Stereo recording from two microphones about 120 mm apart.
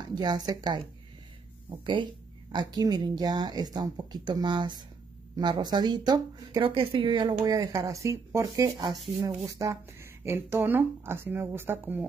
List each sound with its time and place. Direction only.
0.0 s a woman's voice: 35° right (ahead or behind)
6.6 s speech: 50° right (ahead or behind)
7.5 s speech: 30° right (ahead or behind)